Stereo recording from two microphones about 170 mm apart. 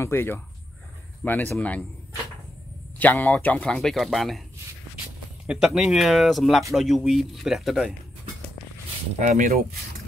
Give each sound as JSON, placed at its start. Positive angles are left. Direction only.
{"t": 0.0, "sound": "speech", "side_deg": 15}
{"t": 3.0, "sound": "speech", "side_deg": 10}
{"t": 5.5, "sound": "speech", "side_deg": -5}
{"t": 9.2, "sound": "speech", "side_deg": -50}